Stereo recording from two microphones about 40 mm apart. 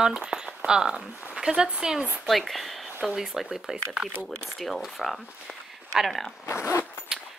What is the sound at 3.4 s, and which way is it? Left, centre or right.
Speech, centre.